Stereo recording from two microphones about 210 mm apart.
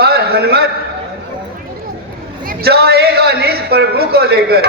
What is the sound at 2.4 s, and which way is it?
A man's voice, 45° right (ahead or behind).